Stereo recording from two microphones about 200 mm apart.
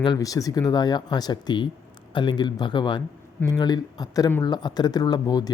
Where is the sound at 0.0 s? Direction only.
20° left (ahead or behind).